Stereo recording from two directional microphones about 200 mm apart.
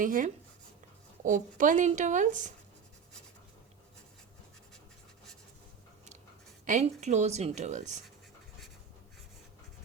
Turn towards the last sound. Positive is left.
turn(degrees=-35)  # may be behind; listen again after turning